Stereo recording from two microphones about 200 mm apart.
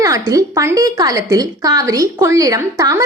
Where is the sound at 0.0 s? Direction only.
15° right (ahead or behind).